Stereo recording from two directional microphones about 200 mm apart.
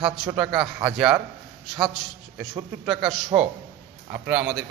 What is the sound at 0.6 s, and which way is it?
Speech, 20° right (ahead or behind).